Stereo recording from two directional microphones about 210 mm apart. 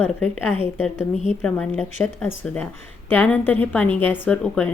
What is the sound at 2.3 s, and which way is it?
Speech, 40° left (ahead or behind).